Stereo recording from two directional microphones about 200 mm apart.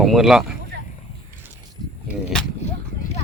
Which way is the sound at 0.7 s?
55° right (ahead or behind).